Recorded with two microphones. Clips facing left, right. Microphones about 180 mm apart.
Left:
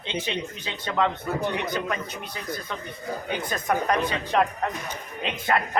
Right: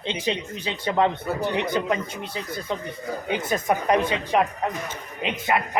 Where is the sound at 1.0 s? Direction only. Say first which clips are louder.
Right 2 dB; 30° right (ahead or behind).